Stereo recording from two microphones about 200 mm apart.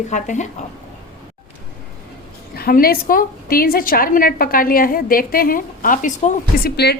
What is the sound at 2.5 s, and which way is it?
A woman's voice, 50° left (ahead or behind).